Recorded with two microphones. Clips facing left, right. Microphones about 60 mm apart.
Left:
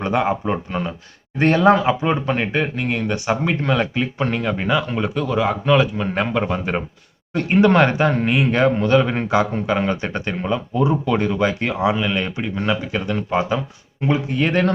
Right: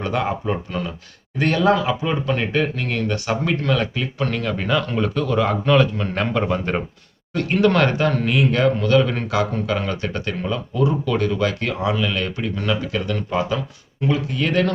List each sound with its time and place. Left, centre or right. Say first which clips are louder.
0.0 s speech: left 3 dB; left
7.3 s speech: left 3 dB; left